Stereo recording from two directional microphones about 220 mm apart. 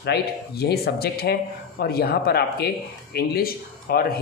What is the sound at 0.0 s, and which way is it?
Speech, 45° left (ahead or behind).